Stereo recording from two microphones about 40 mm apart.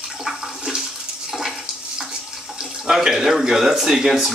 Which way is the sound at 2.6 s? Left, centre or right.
Centre.